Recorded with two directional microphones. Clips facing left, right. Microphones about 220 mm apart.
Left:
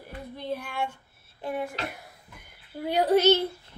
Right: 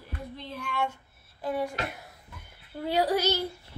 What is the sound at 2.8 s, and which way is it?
Female singing, 20° left (ahead or behind).